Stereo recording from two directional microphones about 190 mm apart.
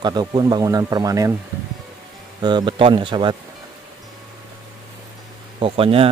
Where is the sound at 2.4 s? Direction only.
25° right (ahead or behind).